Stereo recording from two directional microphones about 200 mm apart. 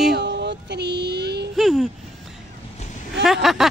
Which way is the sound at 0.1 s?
60° right (ahead or behind).